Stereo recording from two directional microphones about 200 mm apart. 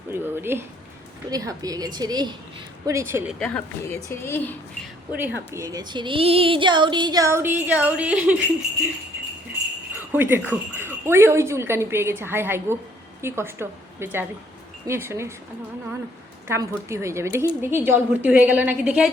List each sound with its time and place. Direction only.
0.1 s a woman's voice: 10° right (ahead or behind)
3.3 s a woman's voice: 5° left (ahead or behind)
5.1 s speech: 10° right (ahead or behind)
9.9 s speech: 10° right (ahead or behind)
16.5 s speech: 15° right (ahead or behind)